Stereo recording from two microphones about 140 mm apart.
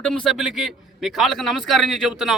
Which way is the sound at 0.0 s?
5° left (ahead or behind).